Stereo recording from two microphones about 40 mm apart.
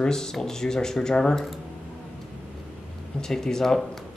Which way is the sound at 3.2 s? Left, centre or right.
Centre.